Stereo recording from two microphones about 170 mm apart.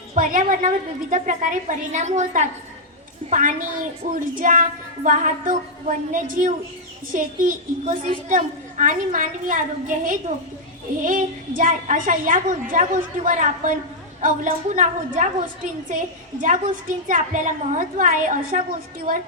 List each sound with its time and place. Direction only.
0.2 s a woman's voice: 50° right (ahead or behind)